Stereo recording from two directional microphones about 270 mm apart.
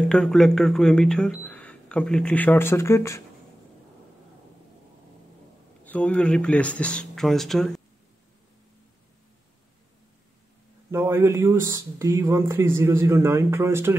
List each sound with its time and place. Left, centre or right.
0.1 s speech: centre
5.9 s speech: centre
10.9 s speech: centre